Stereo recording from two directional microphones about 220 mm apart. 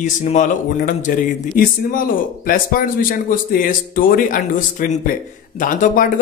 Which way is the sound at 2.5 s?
40° left (ahead or behind).